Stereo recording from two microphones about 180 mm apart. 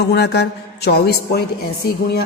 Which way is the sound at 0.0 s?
65° left (ahead or behind).